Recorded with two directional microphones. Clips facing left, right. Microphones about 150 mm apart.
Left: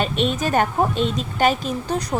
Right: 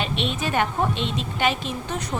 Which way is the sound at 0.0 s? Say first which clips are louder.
Left 5 dB; 45° left (ahead or behind).